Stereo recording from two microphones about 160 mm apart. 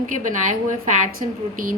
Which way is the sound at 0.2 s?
55° right (ahead or behind).